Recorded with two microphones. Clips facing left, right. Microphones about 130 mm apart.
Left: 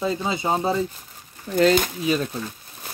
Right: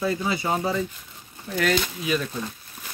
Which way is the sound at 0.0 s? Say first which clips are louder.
Left 1 dB; 20° left (ahead or behind).